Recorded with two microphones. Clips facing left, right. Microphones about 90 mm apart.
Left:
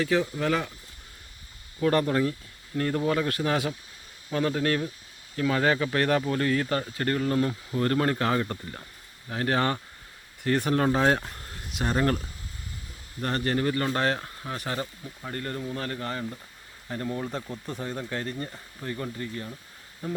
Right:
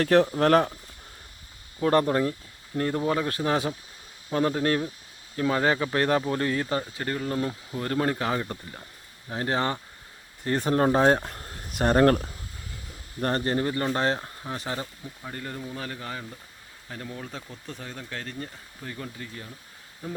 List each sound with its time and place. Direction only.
0.0 s speech: 55° right (ahead or behind)
1.8 s speech: 30° right (ahead or behind)
6.9 s speech: 5° right (ahead or behind); by 11.2 s 25° right (ahead or behind)
11.2 s speech: 40° right (ahead or behind)
13.2 s speech: 30° right (ahead or behind)
15.2 s speech: 5° right (ahead or behind)
17.1 s speech: 15° left (ahead or behind)
17.7 s speech: 5° left (ahead or behind)